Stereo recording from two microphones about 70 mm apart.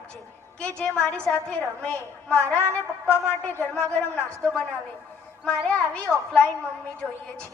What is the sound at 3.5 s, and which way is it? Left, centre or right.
Speech, left.